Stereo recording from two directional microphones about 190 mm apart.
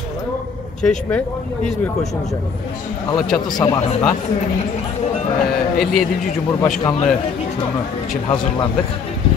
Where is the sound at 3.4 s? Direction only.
20° left (ahead or behind).